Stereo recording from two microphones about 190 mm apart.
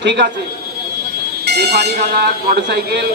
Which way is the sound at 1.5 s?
60° right (ahead or behind).